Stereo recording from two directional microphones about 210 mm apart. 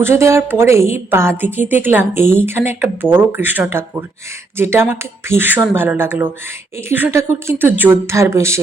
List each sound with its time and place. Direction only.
0.0 s a woman's voice: 15° right (ahead or behind)